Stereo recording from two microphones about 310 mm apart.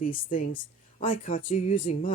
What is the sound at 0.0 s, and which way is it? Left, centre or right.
Speech, left.